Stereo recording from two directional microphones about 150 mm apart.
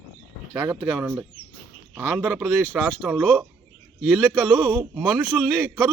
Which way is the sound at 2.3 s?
5° right (ahead or behind).